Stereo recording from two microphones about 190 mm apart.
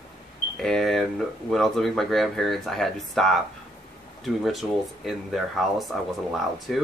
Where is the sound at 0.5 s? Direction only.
Centre (ahead or behind).